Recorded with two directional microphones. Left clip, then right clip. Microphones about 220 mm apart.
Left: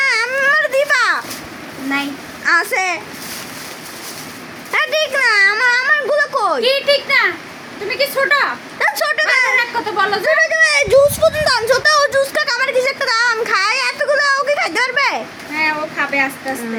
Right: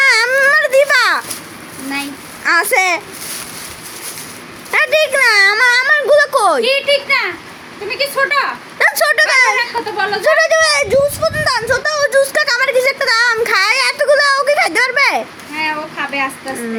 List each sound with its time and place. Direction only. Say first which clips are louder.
0.0 s baby cry: right 4 dB; 25° right (ahead or behind)
2.4 s a child's voice: right 3 dB; 15° right (ahead or behind)
4.7 s a child's voice: right 4 dB; 15° right (ahead or behind)
6.6 s a child's voice: right 1 dB; 15° left (ahead or behind)
8.8 s speech: right 4 dB; 15° right (ahead or behind)
9.6 s a child's voice: left 1 dB; 15° left (ahead or behind)
10.2 s a child's voice: right 5 dB; 25° right (ahead or behind)
10.6 s speech: left 1 dB; 5° right (ahead or behind)
12.0 s speech: right 3 dB; 10° right (ahead or behind)
15.5 s a child's voice: left 2 dB; 15° left (ahead or behind)